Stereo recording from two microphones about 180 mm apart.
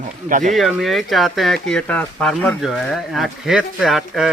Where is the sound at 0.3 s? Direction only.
45° right (ahead or behind).